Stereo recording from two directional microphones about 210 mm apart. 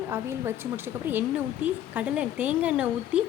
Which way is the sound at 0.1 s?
10° right (ahead or behind).